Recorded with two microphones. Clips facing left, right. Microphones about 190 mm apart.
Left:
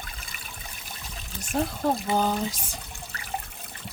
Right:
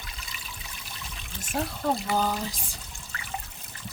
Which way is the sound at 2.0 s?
20° left (ahead or behind).